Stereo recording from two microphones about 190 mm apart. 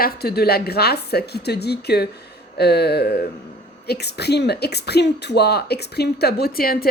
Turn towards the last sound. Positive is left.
turn(degrees=50)  # may be behind; listen again after turning